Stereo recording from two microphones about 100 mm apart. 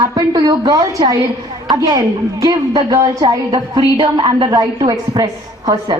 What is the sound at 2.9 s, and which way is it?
Speech, 35° right (ahead or behind).